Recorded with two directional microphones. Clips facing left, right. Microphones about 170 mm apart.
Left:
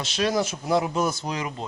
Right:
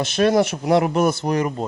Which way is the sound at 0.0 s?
55° right (ahead or behind).